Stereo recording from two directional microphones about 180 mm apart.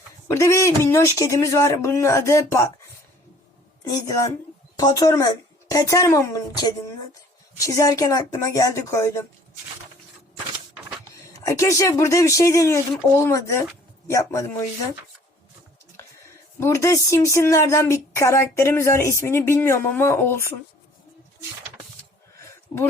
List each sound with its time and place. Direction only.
0.3 s speech: 15° left (ahead or behind)
3.8 s a woman's voice: 20° left (ahead or behind)
11.4 s speech: 15° left (ahead or behind)
16.6 s speech: 15° left (ahead or behind)
22.4 s a sound: 15° left (ahead or behind)